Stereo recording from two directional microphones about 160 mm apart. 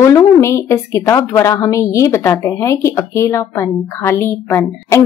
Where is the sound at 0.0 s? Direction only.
15° left (ahead or behind).